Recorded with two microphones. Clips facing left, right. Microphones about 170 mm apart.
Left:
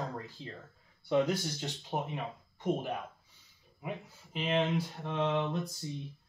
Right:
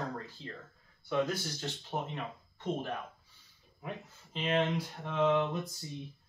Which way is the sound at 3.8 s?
10° left (ahead or behind).